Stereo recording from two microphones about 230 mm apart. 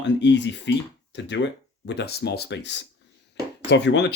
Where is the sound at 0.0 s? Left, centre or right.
Left.